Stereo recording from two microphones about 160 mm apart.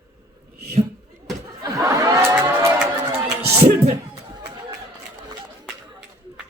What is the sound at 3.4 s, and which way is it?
Music, 15° right (ahead or behind).